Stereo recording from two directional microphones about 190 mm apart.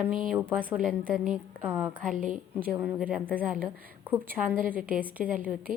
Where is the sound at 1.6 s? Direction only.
10° right (ahead or behind).